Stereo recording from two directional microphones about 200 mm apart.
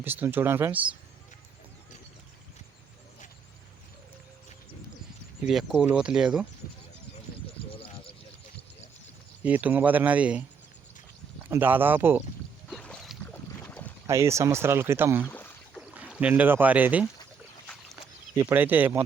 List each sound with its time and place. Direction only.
0.0 s speech: 10° right (ahead or behind)
5.5 s speech: centre (ahead or behind)
7.7 s a sound: 25° left (ahead or behind)
9.4 s speech: 5° right (ahead or behind)
11.4 s speech: 10° right (ahead or behind)
12.7 s boat: 5° left (ahead or behind)
14.1 s speech: 15° right (ahead or behind)
15.3 s rowboat: 10° left (ahead or behind)
15.8 s speech: 5° right (ahead or behind)
18.3 s speech: 10° right (ahead or behind)